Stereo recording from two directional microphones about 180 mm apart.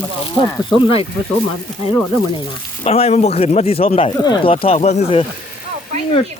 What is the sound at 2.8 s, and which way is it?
Speech, 35° left (ahead or behind).